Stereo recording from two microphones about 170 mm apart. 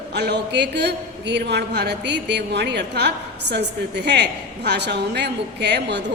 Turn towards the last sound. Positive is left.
turn(degrees=-75)  # may be behind; listen again after turning